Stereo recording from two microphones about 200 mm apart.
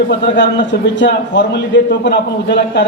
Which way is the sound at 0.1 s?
60° left (ahead or behind).